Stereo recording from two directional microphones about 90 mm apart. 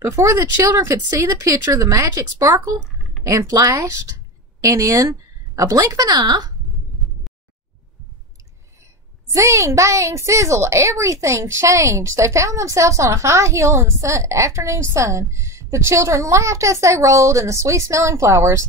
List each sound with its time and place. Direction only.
0.0 s a woman's voice: 35° right (ahead or behind); by 6.5 s 55° right (ahead or behind)
9.3 s a woman's voice: 35° right (ahead or behind)